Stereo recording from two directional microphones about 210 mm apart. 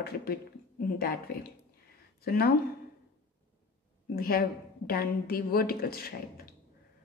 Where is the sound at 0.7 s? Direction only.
45° left (ahead or behind).